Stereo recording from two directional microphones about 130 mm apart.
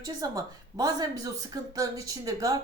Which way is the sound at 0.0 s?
30° right (ahead or behind).